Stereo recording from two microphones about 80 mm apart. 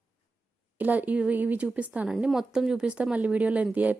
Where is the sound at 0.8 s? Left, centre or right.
Right.